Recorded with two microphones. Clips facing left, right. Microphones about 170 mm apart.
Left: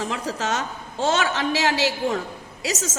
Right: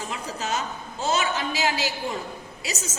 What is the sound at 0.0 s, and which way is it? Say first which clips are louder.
A woman's voice: left 5 dB; 85° left.